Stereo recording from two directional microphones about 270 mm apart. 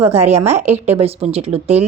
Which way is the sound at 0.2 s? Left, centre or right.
Right.